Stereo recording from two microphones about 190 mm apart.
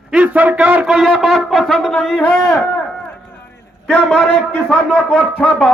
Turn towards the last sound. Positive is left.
turn(degrees=5)  # may be behind; listen again after turning